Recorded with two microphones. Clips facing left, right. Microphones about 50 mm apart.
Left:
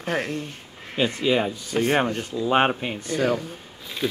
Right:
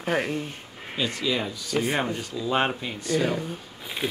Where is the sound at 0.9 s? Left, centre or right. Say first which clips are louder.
Left 5 dB; left.